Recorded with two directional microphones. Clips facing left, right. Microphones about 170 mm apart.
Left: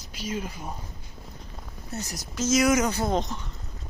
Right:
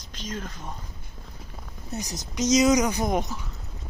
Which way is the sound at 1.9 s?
20° right (ahead or behind).